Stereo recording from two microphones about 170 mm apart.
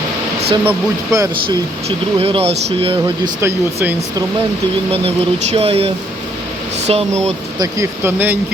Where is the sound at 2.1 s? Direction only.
35° right (ahead or behind).